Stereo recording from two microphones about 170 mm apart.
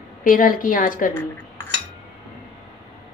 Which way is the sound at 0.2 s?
50° left (ahead or behind).